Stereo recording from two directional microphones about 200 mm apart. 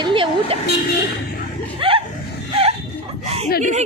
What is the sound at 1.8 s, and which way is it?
Chuckle, 25° right (ahead or behind).